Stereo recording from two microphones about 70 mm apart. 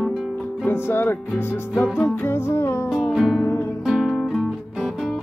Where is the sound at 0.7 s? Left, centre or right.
Left.